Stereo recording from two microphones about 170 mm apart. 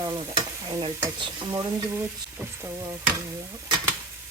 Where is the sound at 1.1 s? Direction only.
25° right (ahead or behind).